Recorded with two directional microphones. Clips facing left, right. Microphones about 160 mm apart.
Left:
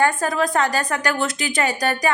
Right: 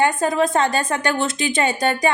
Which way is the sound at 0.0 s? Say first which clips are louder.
Right 2 dB; 20° right (ahead or behind).